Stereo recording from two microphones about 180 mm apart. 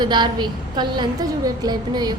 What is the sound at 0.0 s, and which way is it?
A woman's voice, 25° right (ahead or behind).